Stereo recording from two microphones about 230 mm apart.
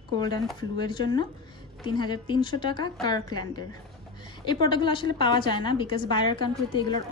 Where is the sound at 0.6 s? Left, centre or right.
Centre.